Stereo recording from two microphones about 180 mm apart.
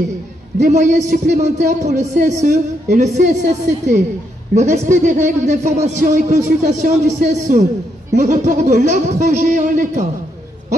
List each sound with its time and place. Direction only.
0.6 s a man's voice: 45° right (ahead or behind)